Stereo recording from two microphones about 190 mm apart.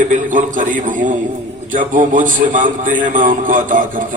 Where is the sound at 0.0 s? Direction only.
45° right (ahead or behind).